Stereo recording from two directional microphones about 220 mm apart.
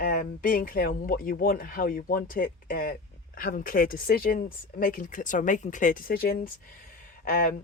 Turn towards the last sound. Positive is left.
turn(degrees=40)  # may be behind; listen again after turning